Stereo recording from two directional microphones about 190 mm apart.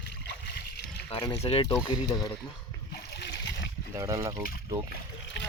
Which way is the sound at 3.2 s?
70° left (ahead or behind).